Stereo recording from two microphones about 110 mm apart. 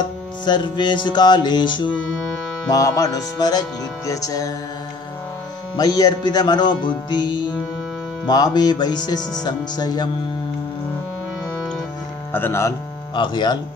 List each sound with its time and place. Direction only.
0.5 s music: 45° left (ahead or behind)
2.7 s music: 35° left (ahead or behind)
5.8 s music: 40° left (ahead or behind)
12.3 s speech: 20° left (ahead or behind)
13.1 s music: 45° left (ahead or behind)